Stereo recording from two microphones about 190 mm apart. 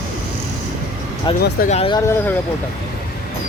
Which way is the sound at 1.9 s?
15° left (ahead or behind).